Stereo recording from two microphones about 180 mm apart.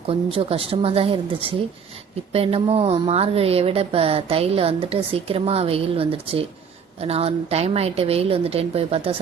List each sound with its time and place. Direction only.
0.1 s speech: 30° right (ahead or behind)